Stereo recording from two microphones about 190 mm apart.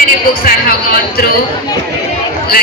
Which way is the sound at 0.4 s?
55° left (ahead or behind).